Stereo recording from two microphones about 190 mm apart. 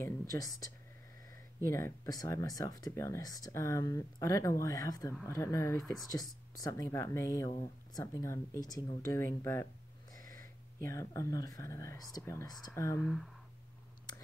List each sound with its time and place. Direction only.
0.0 s speech: 20° left (ahead or behind)
1.7 s speech: 15° left (ahead or behind)
10.1 s a sound: 45° right (ahead or behind)
10.8 s speech: 15° left (ahead or behind)